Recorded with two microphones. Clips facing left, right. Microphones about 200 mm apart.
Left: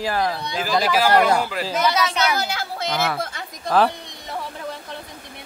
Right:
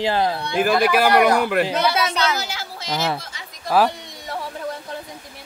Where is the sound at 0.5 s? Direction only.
60° right (ahead or behind).